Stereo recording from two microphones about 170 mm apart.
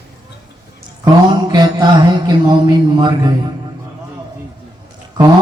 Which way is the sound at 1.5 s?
25° right (ahead or behind).